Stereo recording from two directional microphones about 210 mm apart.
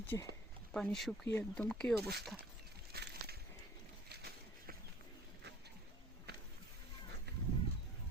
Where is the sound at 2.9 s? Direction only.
50° right (ahead or behind).